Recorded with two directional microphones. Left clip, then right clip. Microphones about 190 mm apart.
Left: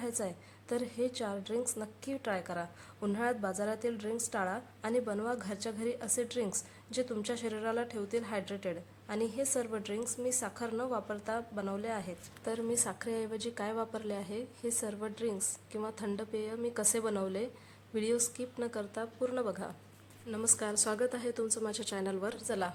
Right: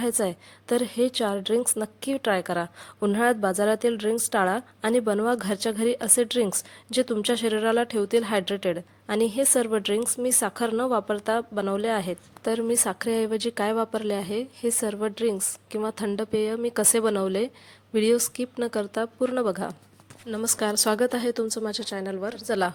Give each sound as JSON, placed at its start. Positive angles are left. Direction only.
{"t": 0.0, "sound": "a woman's voice", "side_deg": -45}
{"t": 22.4, "sound": "a woman's voice", "side_deg": -35}